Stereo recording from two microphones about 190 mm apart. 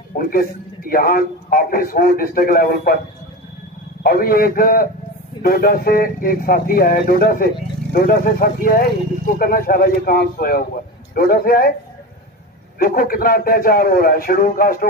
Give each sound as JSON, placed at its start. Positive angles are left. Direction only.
{"t": 0.2, "sound": "speech", "side_deg": 50}
{"t": 4.0, "sound": "speech", "side_deg": 50}
{"t": 12.7, "sound": "speech", "side_deg": 50}